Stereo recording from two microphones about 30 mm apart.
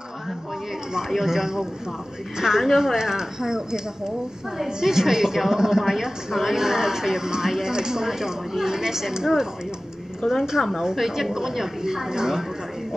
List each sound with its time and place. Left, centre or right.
1.2 s a woman's voice: centre
4.8 s a woman's voice: centre
10.2 s a woman's voice: left
11.0 s a woman's voice: centre